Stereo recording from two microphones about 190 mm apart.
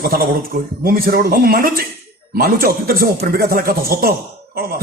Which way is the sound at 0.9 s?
50° right (ahead or behind).